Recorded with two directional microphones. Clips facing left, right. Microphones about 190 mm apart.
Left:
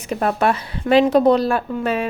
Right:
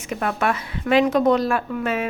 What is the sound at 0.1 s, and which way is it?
A woman's voice, 35° left (ahead or behind).